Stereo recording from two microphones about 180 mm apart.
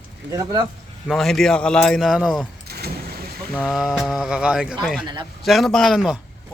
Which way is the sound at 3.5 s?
Centre (ahead or behind).